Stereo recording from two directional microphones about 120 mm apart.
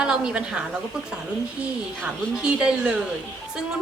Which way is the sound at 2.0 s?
5° right (ahead or behind).